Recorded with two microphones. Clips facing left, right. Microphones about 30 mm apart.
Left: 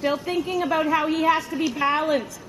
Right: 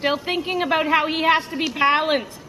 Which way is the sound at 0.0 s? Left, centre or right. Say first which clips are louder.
Right 2 dB; right.